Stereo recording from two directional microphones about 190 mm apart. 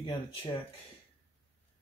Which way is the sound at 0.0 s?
25° left (ahead or behind).